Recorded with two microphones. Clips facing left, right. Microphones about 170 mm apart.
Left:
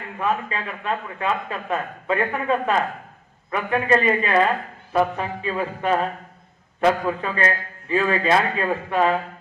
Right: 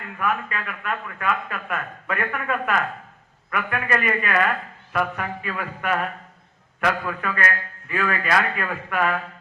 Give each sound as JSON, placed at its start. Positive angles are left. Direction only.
{"t": 0.0, "sound": "a man's voice", "side_deg": 25}